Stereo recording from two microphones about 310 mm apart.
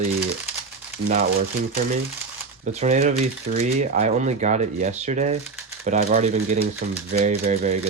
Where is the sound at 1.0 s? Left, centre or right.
Right.